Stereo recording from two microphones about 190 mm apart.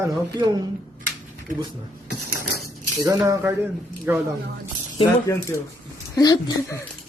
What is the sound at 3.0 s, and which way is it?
Speech, 15° right (ahead or behind).